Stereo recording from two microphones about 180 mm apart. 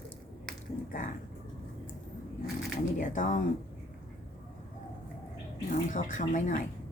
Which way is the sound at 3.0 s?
45° left (ahead or behind).